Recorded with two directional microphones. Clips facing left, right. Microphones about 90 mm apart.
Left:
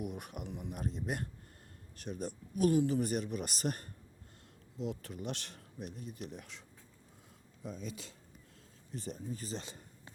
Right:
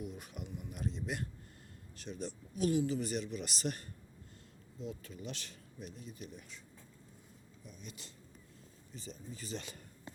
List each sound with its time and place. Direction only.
0.0 s speech: 60° left (ahead or behind)
0.7 s speech: 50° left (ahead or behind)
4.8 s speech: 70° left (ahead or behind)
8.9 s speech: 55° left (ahead or behind)
9.5 s speech: 30° left (ahead or behind)